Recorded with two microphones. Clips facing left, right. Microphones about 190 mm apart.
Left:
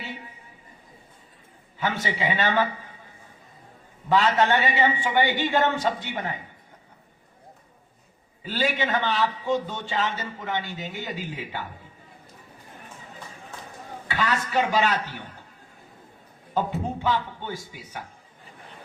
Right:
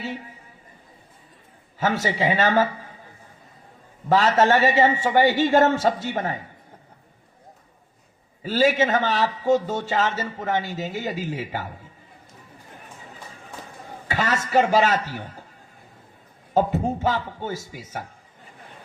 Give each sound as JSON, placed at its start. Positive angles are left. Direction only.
{"t": 1.8, "sound": "a man's voice", "side_deg": -40}
{"t": 4.1, "sound": "a man's voice", "side_deg": -40}
{"t": 8.4, "sound": "a man's voice", "side_deg": -40}
{"t": 14.1, "sound": "a man's voice", "side_deg": -40}
{"t": 17.0, "sound": "a man's voice", "side_deg": -40}